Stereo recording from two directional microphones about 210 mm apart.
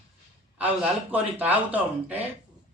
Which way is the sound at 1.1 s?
5° right (ahead or behind).